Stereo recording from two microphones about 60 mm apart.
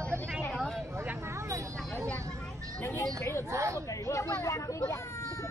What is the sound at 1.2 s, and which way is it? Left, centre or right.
Vehicle, right.